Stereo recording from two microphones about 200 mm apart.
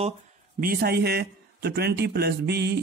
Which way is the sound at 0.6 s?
50° right (ahead or behind).